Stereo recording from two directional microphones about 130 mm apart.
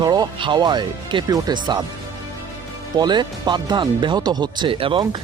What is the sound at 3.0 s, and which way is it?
Speech, 35° right (ahead or behind).